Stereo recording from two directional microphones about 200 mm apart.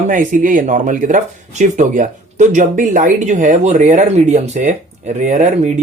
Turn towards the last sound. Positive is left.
turn(degrees=-35)  # may be behind; listen again after turning